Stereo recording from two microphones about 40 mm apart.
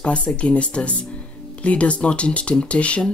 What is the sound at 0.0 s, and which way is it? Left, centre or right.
Speech, left.